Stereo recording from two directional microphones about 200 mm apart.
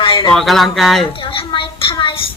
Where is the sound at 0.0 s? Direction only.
25° left (ahead or behind).